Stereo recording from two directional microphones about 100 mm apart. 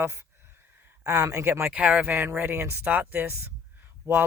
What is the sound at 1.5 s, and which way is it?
Speech, 15° right (ahead or behind).